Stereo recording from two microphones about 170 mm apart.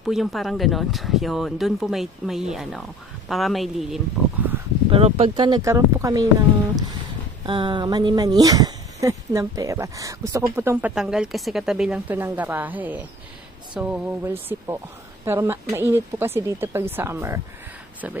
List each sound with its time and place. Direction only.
0.0 s speech: centre (ahead or behind)
4.9 s speech: 35° right (ahead or behind); by 6.2 s 20° right (ahead or behind)
7.4 s speech: 30° right (ahead or behind)
11.0 s speech: 5° right (ahead or behind)